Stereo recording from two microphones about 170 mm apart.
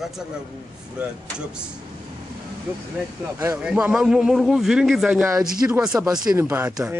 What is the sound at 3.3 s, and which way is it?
A man's voice, 15° right (ahead or behind).